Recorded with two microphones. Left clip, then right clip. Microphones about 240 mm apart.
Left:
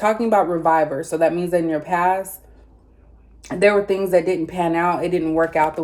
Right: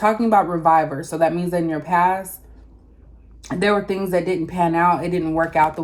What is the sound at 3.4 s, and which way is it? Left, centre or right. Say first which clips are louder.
Speech: left 3 dB; centre.